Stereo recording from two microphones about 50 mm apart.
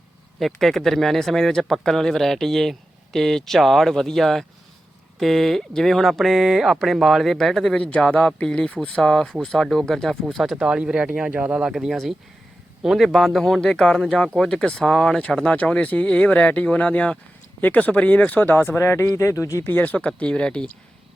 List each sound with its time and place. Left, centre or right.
0.3 s speech: centre
7.8 s speech: left; by 10.6 s centre
10.6 s speech: centre
12.8 s a man's voice: centre
15.8 s speech: left
18.8 s speech: left
19.6 s speech: left
20.1 s speech: left